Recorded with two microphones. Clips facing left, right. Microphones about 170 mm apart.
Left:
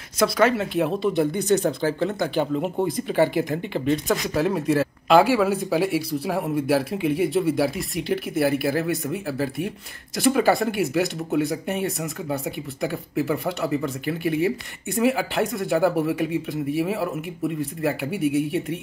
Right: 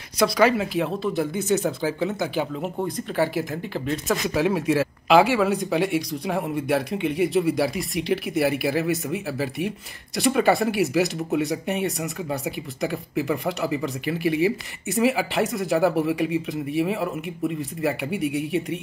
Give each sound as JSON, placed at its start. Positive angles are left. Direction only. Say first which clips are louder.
{"t": 0.2, "sound": "speech", "louder": "even", "side_deg": 0}